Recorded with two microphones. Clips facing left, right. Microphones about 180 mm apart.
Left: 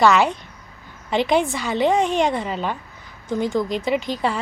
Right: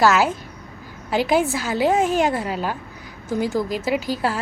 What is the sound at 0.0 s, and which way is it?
A woman's voice, 5° right (ahead or behind).